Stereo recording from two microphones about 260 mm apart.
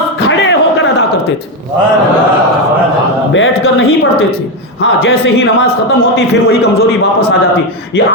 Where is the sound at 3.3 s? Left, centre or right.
Left.